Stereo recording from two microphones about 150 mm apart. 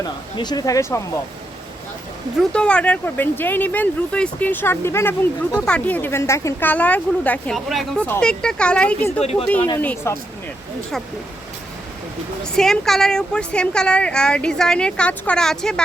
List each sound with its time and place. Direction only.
0.0 s speech: 25° left (ahead or behind)
2.5 s speech: 5° left (ahead or behind)
5.5 s a woman's voice: 5° left (ahead or behind)
9.2 s speech: 45° left (ahead or behind)
9.8 s speech: 15° left (ahead or behind)
12.4 s a woman's voice: 5° left (ahead or behind)